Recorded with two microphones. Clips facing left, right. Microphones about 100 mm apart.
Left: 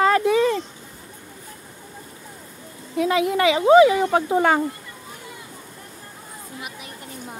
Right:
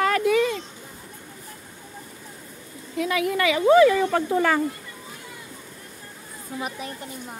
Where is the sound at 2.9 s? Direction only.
25° left (ahead or behind).